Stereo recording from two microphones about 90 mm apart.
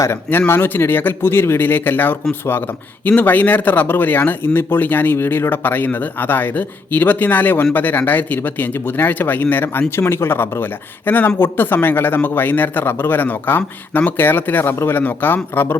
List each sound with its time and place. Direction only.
0.0 s speech: 25° left (ahead or behind)